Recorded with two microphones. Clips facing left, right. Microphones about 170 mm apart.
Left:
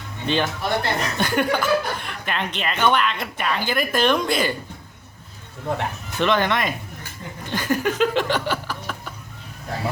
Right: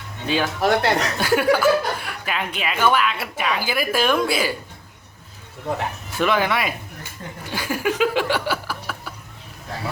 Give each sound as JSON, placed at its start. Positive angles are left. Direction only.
{"t": 0.3, "sound": "speech", "side_deg": -5}
{"t": 0.6, "sound": "speech", "side_deg": -85}
{"t": 1.2, "sound": "speech", "side_deg": -5}
{"t": 5.7, "sound": "speech", "side_deg": -5}
{"t": 7.5, "sound": "a sound", "side_deg": -10}